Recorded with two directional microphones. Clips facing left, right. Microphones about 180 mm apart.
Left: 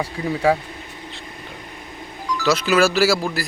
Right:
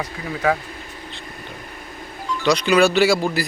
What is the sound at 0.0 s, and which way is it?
Speech, 30° left (ahead or behind).